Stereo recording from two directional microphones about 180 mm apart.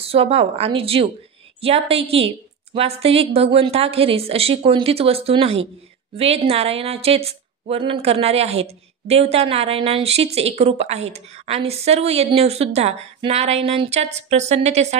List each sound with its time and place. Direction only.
0.0 s a woman's voice: 35° right (ahead or behind)